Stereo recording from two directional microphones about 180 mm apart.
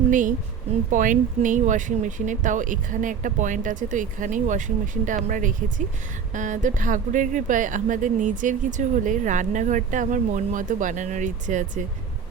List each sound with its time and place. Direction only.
0.1 s a woman's voice: 45° right (ahead or behind)